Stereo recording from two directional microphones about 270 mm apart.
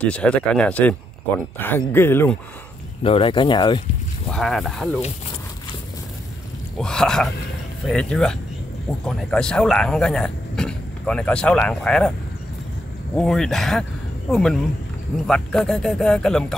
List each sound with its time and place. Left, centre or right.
0.0 s speech: centre
3.0 s speech: left
4.3 s speech: centre
6.8 s speech: centre
13.1 s speech: centre